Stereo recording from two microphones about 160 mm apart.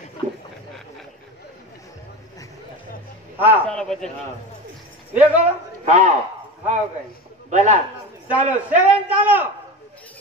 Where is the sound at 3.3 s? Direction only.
10° right (ahead or behind).